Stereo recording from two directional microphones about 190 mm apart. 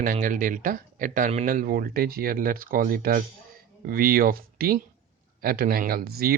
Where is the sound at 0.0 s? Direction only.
45° right (ahead or behind).